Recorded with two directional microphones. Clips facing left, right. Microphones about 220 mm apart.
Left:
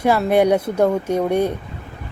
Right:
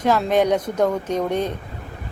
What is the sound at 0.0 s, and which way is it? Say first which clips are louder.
A woman's voice: left 3 dB; 10° left (ahead or behind).